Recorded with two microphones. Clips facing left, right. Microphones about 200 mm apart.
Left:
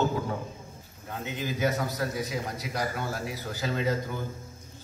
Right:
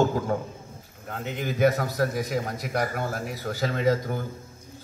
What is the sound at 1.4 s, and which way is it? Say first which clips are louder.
A man's voice: right 6 dB; 60° right (ahead or behind).